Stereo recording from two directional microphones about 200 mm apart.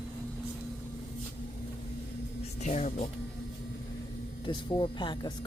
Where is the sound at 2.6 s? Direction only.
35° left (ahead or behind).